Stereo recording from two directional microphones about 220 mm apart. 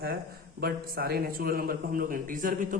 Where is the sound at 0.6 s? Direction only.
45° right (ahead or behind).